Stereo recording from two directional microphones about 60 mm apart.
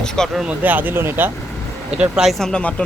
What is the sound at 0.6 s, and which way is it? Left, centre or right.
Speech, right.